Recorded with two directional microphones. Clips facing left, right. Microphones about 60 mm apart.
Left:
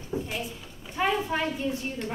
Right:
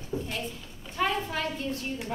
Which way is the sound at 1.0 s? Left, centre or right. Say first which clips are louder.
Left 2 dB; centre.